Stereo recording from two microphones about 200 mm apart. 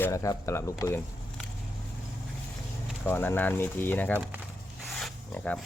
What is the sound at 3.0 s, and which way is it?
Speech, 10° left (ahead or behind).